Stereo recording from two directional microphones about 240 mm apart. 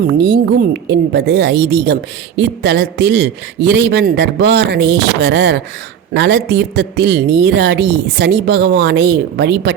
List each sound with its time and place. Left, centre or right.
0.1 s a woman's voice: right